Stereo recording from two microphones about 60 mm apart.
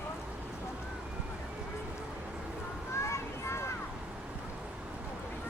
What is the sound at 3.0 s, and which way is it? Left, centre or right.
Vehicle, left.